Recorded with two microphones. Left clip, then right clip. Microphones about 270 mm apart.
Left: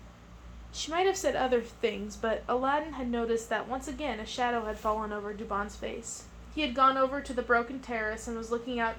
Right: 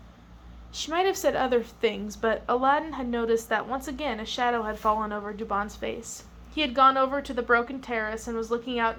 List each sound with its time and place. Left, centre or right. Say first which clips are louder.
0.7 s a woman's voice: right 3 dB; right